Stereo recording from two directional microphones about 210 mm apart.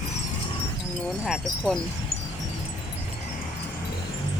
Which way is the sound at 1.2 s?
Centre (ahead or behind).